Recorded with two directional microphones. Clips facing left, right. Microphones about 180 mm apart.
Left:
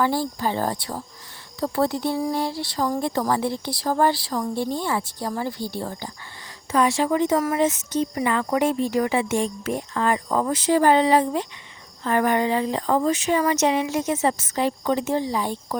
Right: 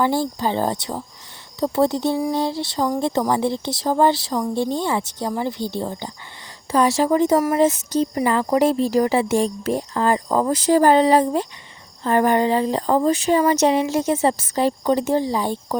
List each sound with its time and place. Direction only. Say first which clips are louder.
0.0 s speech: right 3 dB; 25° right (ahead or behind)
6.7 s speech: right 3 dB; 35° right (ahead or behind)